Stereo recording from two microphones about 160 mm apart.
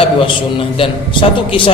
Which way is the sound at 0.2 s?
35° left (ahead or behind).